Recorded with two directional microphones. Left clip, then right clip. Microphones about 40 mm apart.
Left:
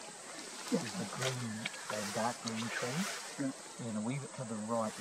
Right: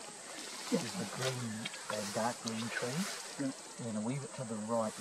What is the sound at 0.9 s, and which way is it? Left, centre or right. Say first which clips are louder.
Speech: even; centre.